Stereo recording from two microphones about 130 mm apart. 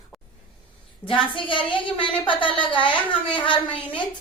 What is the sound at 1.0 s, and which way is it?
A woman's voice, 40° left (ahead or behind).